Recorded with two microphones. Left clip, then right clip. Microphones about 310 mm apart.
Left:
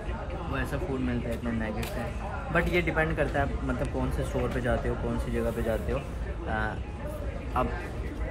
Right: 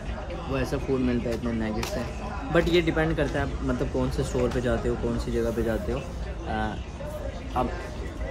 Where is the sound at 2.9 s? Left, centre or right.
Centre.